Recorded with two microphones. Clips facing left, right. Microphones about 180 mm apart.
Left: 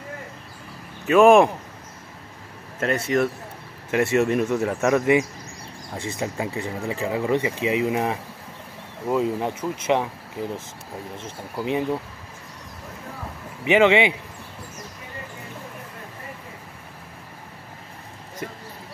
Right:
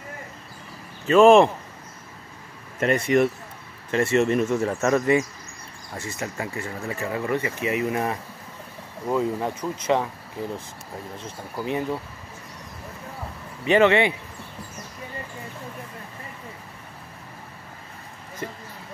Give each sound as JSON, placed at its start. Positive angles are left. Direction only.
{"t": 1.0, "sound": "speech", "side_deg": 0}
{"t": 2.8, "sound": "speech", "side_deg": 0}
{"t": 11.6, "sound": "speech", "side_deg": 20}
{"t": 13.7, "sound": "speech", "side_deg": 15}